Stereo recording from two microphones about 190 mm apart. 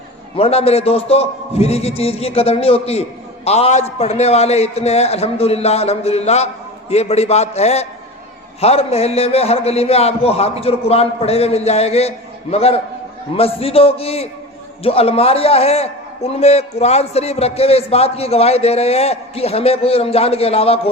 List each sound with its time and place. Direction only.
0.3 s a man's voice: 30° left (ahead or behind)